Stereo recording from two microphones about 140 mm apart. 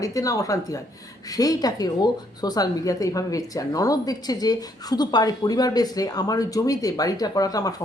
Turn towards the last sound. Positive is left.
turn(degrees=25)  # may be behind; listen again after turning